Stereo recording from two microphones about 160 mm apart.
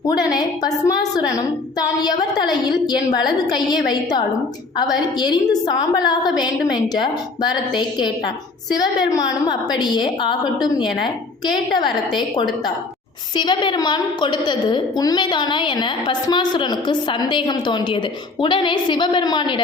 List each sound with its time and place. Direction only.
0.3 s a woman's voice: 25° left (ahead or behind)